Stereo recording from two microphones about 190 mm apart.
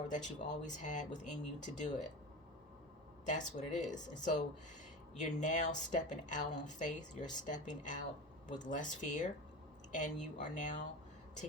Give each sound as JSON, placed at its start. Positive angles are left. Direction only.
{"t": 0.1, "sound": "speech", "side_deg": 40}
{"t": 3.2, "sound": "speech", "side_deg": 40}